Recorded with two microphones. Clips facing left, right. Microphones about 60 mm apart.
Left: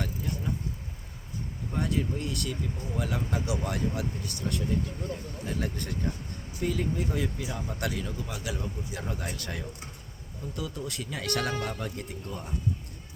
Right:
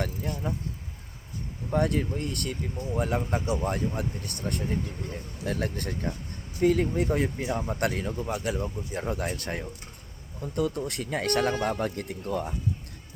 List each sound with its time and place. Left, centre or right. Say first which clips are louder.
0.0 s speech: right 2 dB; right
1.7 s speech: right 4 dB; right
7.4 s speech: right 5 dB; right